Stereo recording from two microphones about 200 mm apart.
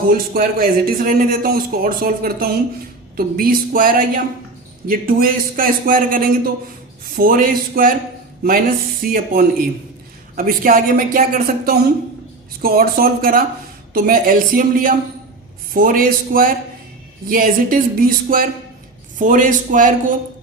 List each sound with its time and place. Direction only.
0.1 s a man's voice: 45° right (ahead or behind)